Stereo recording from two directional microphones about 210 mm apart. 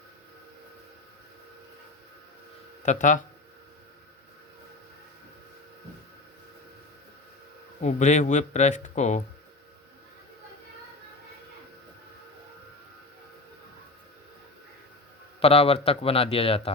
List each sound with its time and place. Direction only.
2.8 s speech: 35° left (ahead or behind)
7.8 s speech: 35° left (ahead or behind)
15.4 s a man's voice: 30° left (ahead or behind)